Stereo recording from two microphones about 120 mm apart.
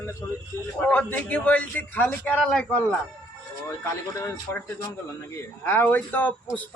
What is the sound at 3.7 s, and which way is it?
A man's voice, 25° left (ahead or behind).